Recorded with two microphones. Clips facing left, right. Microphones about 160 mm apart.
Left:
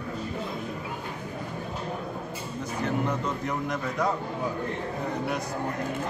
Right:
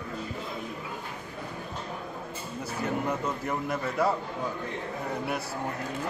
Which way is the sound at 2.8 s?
5° right (ahead or behind).